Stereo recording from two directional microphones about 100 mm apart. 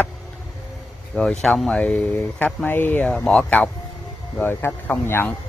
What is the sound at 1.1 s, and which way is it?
Speech, 5° left (ahead or behind).